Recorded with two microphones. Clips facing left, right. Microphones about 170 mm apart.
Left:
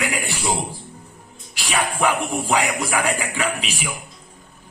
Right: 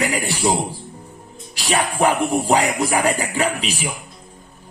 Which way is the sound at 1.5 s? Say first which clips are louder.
Right 3 dB; 40° right (ahead or behind).